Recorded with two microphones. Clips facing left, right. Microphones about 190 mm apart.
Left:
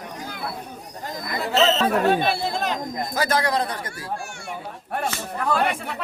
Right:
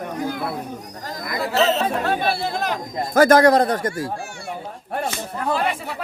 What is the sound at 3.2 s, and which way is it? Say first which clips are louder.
Speech: right 10 dB; 45° right (ahead or behind).